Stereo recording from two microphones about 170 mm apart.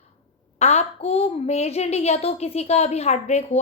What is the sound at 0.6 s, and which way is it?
Speech, 40° left (ahead or behind).